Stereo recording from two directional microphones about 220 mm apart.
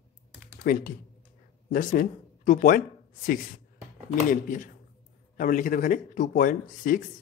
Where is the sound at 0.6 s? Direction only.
40° left (ahead or behind).